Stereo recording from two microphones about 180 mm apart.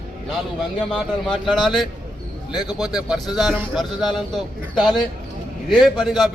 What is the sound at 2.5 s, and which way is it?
Speech, 25° left (ahead or behind).